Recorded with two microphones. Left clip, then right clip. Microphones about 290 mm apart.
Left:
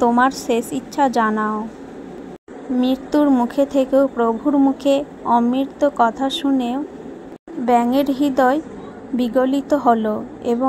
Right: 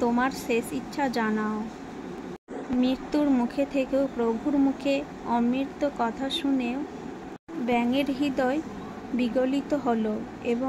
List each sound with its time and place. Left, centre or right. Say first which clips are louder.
0.0 s speech: left 10 dB; centre
2.8 s speech: left 9 dB; centre